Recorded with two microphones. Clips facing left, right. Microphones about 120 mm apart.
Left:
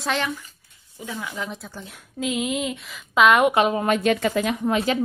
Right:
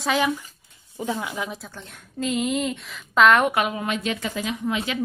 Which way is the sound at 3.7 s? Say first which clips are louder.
Left 6 dB; 50° left (ahead or behind).